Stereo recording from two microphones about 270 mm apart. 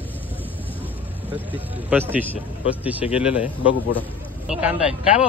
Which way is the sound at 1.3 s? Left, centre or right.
Centre.